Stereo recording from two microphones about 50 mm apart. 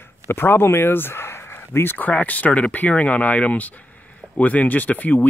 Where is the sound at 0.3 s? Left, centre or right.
Left.